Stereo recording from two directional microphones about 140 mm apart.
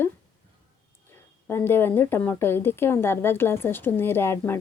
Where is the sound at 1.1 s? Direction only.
15° left (ahead or behind).